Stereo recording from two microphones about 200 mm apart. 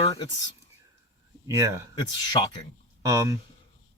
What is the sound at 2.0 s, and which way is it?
Speech, 20° left (ahead or behind).